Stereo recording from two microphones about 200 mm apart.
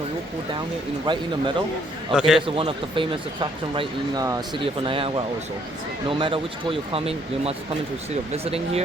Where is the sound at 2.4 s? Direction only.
25° right (ahead or behind).